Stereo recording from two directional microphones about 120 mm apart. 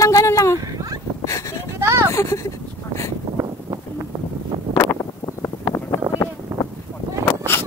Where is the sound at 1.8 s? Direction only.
25° right (ahead or behind).